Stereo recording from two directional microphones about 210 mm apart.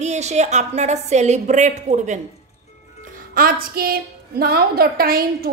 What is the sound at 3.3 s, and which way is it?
A woman's voice, 45° right (ahead or behind).